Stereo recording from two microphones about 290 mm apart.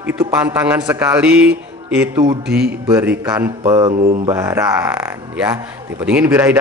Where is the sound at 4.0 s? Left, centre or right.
Right.